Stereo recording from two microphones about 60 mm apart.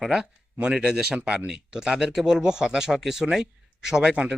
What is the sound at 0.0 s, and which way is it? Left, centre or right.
Speech, centre.